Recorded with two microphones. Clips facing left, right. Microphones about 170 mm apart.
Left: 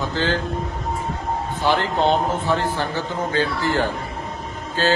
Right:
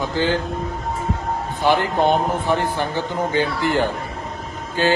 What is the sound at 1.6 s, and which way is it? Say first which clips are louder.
A man's voice: right 2 dB; 15° right (ahead or behind).